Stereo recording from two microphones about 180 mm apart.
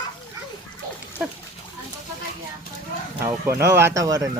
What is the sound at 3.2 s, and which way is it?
Speech, 15° right (ahead or behind).